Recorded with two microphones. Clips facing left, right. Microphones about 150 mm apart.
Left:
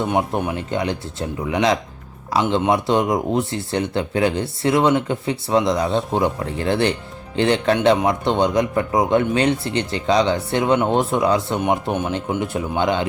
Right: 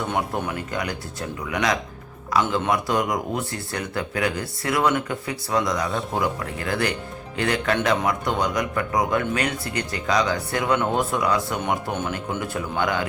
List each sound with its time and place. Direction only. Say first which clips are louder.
0.0 s speech: left 5 dB; 20° left (ahead or behind)